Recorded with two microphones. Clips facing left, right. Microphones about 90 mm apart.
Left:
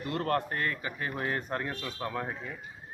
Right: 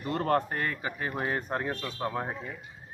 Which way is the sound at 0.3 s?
25° right (ahead or behind).